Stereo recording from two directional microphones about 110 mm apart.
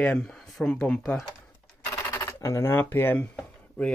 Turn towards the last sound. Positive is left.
turn(degrees=5)  # may be behind; listen again after turning